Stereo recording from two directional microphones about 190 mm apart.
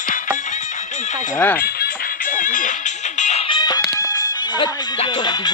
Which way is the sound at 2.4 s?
45° left (ahead or behind).